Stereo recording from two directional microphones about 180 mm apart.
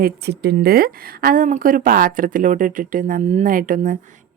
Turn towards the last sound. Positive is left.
turn(degrees=-50)  # may be behind; listen again after turning